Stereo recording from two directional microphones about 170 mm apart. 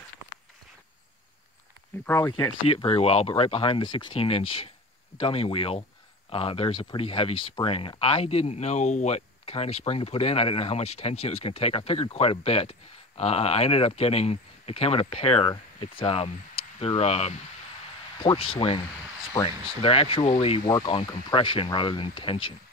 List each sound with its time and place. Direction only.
2.0 s speech: 15° left (ahead or behind)
2.3 s speech: 30° left (ahead or behind)